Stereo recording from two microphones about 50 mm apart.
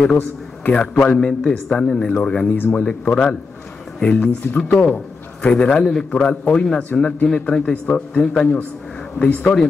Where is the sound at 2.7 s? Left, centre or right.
Left.